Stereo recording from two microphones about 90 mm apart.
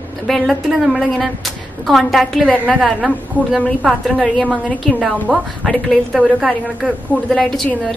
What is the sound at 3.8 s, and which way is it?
Speech, 10° right (ahead or behind).